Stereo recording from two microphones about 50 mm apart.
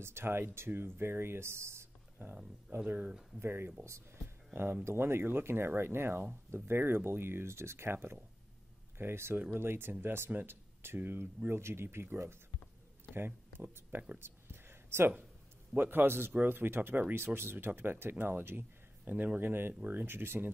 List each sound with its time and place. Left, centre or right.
0.0 s speech: right
2.2 s speech: right
3.3 s speech: right
4.8 s speech: right
13.1 s a sound: right
15.7 s speech: right